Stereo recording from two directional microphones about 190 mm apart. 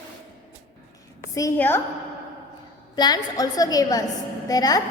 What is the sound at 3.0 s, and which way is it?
A woman's voice, 20° left (ahead or behind).